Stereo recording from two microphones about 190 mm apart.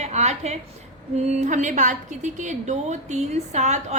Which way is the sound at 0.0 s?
35° right (ahead or behind).